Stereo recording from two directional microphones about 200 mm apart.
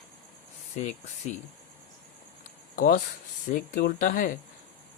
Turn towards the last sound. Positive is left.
turn(degrees=45)  # may be behind; listen again after turning